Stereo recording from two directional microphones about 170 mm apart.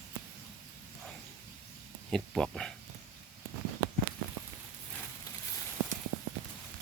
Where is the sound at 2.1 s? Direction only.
5° left (ahead or behind).